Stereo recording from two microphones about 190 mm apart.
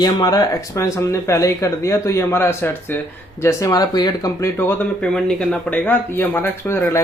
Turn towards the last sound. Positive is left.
turn(degrees=15)  # may be behind; listen again after turning